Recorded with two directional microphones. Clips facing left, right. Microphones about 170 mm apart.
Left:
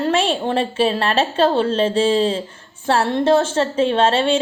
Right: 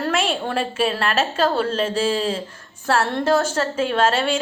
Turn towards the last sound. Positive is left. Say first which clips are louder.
# left 3 dB
turn(degrees=30)  # may be behind; listen again after turning